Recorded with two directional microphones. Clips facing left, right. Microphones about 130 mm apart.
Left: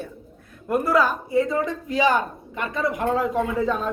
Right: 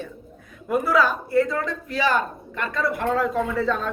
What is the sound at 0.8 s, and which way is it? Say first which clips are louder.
A man's voice: even; 10° left (ahead or behind).